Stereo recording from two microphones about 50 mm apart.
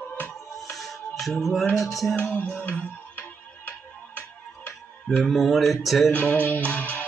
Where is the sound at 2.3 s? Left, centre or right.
Left.